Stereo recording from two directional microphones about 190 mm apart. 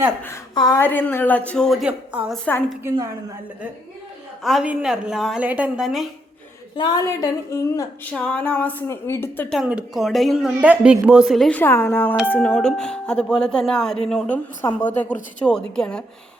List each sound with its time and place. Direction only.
0.5 s a woman's voice: 20° left (ahead or behind)
0.8 s a woman's voice: 10° left (ahead or behind); by 2.2 s 5° right (ahead or behind)
2.3 s a woman's voice: 5° left (ahead or behind)
4.4 s a woman's voice: 5° right (ahead or behind)
6.7 s a woman's voice: 20° left (ahead or behind)
8.1 s a woman's voice: 5° left (ahead or behind)
9.6 s a woman's voice: 5° right (ahead or behind)